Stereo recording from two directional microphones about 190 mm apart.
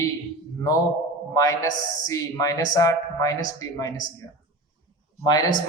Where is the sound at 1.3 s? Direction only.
15° left (ahead or behind).